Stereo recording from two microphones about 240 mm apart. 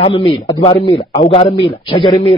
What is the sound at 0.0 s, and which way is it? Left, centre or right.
A man's voice, left.